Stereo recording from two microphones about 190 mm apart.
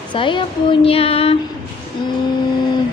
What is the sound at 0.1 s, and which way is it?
A woman's voice, 25° left (ahead or behind).